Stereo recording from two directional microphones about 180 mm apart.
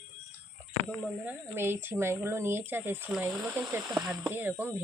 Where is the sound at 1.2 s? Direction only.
15° right (ahead or behind).